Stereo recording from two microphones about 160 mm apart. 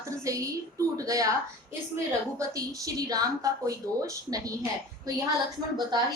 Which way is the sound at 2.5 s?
20° right (ahead or behind).